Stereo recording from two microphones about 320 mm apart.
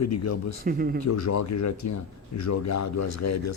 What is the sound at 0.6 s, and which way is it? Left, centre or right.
Speech, right.